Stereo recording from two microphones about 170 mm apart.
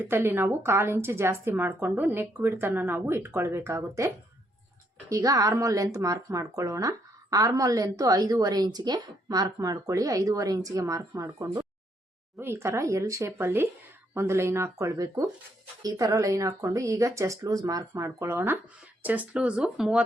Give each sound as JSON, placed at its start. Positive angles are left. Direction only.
{"t": 0.0, "sound": "a woman's voice", "side_deg": -10}